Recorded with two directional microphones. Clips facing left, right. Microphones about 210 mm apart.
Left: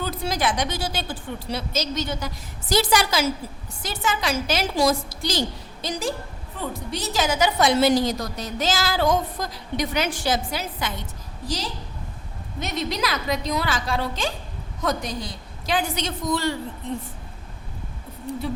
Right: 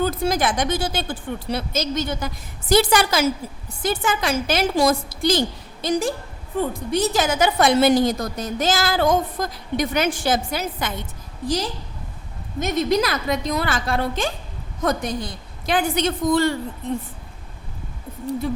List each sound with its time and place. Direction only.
0.0 s a woman's voice: 50° right (ahead or behind)